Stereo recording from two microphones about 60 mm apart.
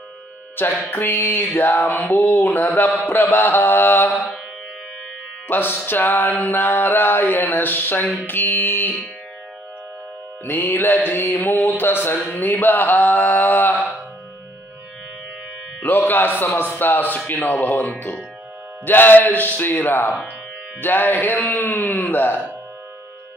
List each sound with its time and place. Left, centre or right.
0.8 s mantra: left
5.5 s mantra: left
10.4 s mantra: left
15.8 s mantra: left